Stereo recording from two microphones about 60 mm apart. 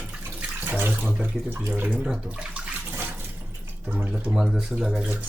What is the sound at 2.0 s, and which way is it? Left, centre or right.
Speech, centre.